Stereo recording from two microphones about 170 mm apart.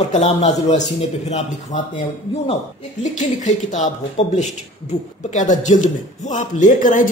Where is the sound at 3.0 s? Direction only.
45° left (ahead or behind).